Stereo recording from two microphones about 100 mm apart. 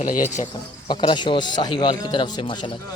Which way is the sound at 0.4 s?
90° left.